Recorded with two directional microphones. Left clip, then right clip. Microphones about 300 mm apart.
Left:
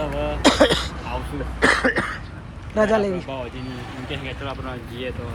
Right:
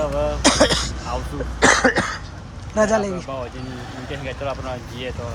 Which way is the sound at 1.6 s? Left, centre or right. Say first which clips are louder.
Right 3 dB; right.